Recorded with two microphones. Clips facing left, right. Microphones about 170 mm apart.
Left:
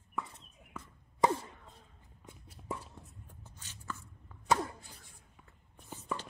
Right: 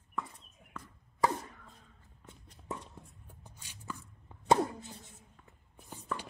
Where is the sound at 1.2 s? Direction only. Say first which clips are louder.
Left 2 dB; 20° left (ahead or behind).